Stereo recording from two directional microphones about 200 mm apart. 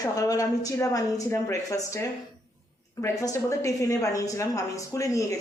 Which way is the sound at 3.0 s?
15° left (ahead or behind).